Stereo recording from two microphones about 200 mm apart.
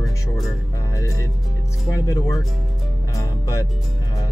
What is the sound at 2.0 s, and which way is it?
Speech, 15° left (ahead or behind).